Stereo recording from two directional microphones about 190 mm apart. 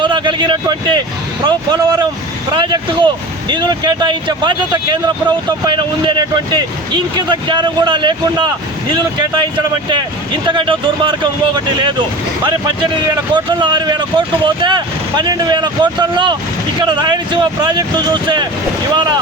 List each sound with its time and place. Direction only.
0.0 s speech: 25° right (ahead or behind)